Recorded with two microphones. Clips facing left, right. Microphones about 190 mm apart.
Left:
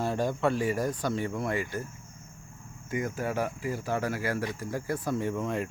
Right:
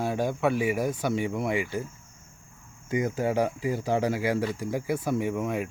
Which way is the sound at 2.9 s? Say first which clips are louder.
Right 5 dB; 20° right (ahead or behind).